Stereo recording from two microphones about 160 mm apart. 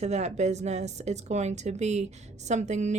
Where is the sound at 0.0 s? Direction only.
45° right (ahead or behind).